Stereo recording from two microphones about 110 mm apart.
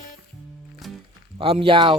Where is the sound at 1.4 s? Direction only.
55° right (ahead or behind).